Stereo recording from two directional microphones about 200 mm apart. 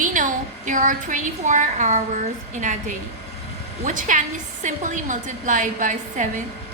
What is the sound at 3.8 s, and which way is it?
A woman's voice, 40° right (ahead or behind).